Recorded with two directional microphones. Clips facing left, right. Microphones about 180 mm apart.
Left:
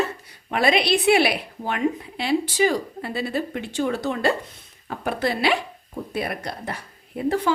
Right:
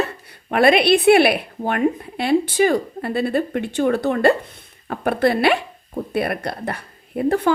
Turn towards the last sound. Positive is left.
turn(degrees=-55)  # may be behind; listen again after turning